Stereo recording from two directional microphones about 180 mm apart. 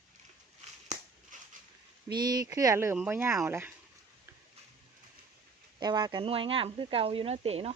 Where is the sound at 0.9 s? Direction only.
40° right (ahead or behind).